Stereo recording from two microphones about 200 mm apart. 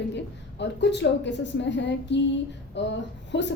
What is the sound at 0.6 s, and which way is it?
A woman's voice, 60° left (ahead or behind).